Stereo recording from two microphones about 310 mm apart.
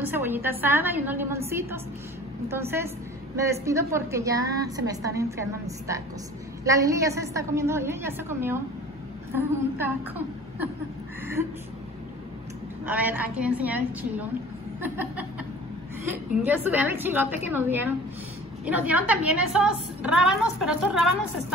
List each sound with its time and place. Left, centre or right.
0.0 s a woman's voice: centre
12.8 s a woman's voice: centre
16.4 s a woman's voice: centre